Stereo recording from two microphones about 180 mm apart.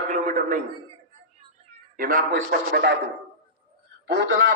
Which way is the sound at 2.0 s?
55° right (ahead or behind).